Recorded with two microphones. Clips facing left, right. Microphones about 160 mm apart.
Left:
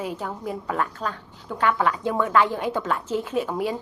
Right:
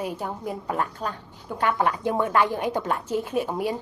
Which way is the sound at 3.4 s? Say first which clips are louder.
Left 1 dB; 45° right (ahead or behind).